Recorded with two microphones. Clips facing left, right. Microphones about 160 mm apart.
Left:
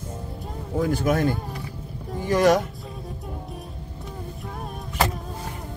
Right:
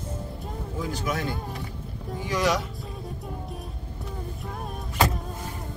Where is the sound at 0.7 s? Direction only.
50° left (ahead or behind).